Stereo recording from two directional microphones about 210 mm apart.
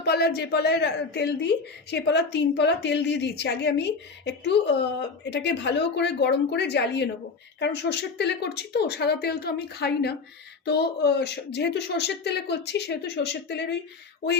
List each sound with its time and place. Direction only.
0.0 s a woman's voice: 50° left (ahead or behind)